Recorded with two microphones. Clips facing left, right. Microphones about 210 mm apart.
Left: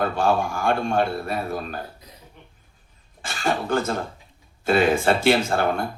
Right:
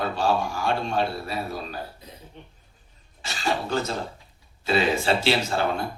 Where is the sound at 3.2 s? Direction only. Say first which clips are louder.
Left 2 dB; 50° left (ahead or behind).